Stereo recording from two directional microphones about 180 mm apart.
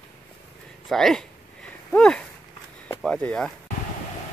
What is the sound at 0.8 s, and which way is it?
Speech, centre (ahead or behind).